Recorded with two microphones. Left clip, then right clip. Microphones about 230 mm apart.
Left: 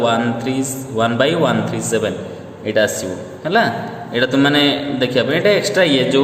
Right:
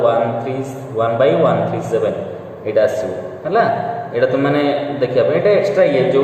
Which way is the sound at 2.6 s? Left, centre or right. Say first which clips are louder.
Right 1 dB; left.